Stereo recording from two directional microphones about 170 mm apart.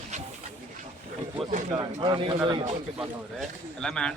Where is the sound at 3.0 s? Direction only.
Centre (ahead or behind).